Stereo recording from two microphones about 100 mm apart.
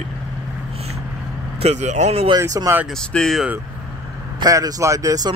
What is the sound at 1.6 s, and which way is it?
Speech, 90° right.